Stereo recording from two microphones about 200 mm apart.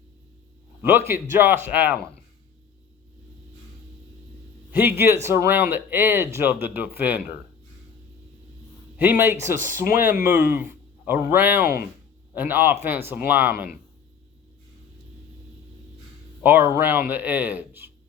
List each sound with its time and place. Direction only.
0.8 s speech: 10° right (ahead or behind)
4.7 s speech: 10° right (ahead or behind)
9.0 s speech: 10° right (ahead or behind)
16.4 s speech: 10° right (ahead or behind)